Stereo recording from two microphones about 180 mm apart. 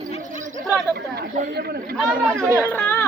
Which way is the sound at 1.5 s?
60° right (ahead or behind).